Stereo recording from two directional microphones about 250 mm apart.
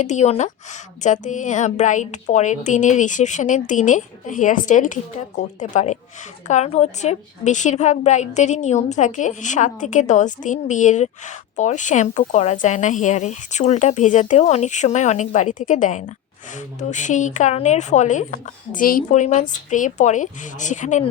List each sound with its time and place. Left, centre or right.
0.0 s a woman's voice: left